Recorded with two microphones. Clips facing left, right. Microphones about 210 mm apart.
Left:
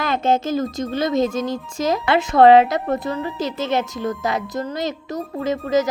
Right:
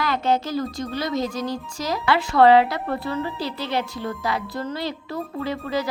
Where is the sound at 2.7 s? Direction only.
45° left (ahead or behind).